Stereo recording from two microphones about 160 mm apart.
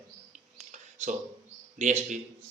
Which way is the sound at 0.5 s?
50° right (ahead or behind).